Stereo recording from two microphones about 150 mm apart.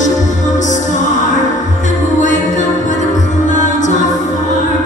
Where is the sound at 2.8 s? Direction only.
55° left (ahead or behind).